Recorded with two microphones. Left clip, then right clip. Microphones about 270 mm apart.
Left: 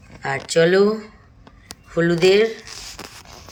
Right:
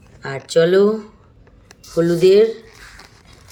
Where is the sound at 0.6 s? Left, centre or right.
Centre.